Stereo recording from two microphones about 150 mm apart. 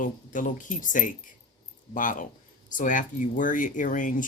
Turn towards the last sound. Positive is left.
turn(degrees=60)  # may be behind; listen again after turning